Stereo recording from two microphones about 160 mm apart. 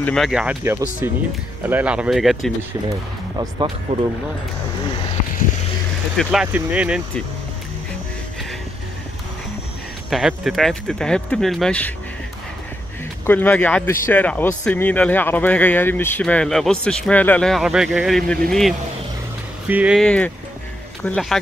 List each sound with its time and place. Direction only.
0.0 s speech: centre (ahead or behind)
1.0 s speech: 15° right (ahead or behind)
3.3 s speech: 25° right (ahead or behind)
6.1 s speech: 5° right (ahead or behind)
10.0 s speech: centre (ahead or behind)
13.2 s speech: 10° left (ahead or behind); by 20.0 s 10° right (ahead or behind)
20.0 s speech: 5° left (ahead or behind)